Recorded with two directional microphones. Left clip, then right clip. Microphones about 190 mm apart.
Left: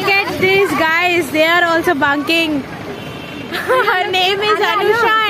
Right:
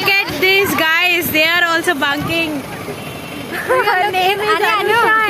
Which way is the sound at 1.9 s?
40° left (ahead or behind).